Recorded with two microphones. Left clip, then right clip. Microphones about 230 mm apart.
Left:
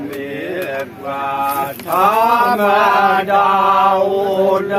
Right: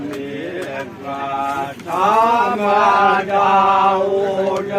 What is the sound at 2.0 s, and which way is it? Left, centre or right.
Chant, left.